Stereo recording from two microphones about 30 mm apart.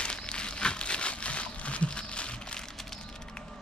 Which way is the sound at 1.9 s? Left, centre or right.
Left.